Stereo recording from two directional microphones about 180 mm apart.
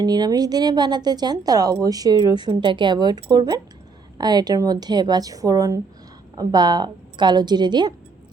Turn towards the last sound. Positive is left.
turn(degrees=-25)  # may be behind; listen again after turning